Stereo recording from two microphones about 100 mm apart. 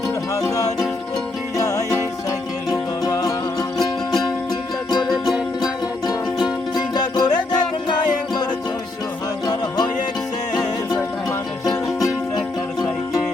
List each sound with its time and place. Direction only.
1.5 s music: 35° left (ahead or behind)
3.0 s music: 40° left (ahead or behind)
6.7 s music: 45° left (ahead or behind)
9.5 s music: 40° left (ahead or behind)
11.3 s music: 35° left (ahead or behind)